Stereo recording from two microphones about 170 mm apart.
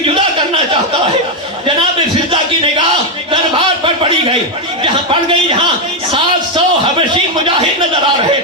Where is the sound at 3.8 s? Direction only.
30° right (ahead or behind).